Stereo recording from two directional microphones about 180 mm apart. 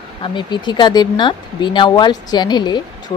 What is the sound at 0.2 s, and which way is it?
Speech, 25° left (ahead or behind).